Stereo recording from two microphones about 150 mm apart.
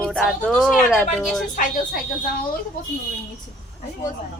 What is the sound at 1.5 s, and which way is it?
Speech, 60° left (ahead or behind).